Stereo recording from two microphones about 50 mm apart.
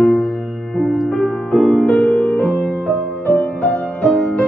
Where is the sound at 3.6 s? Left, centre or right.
Centre.